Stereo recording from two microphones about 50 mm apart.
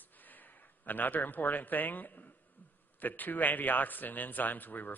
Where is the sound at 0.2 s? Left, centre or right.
Left.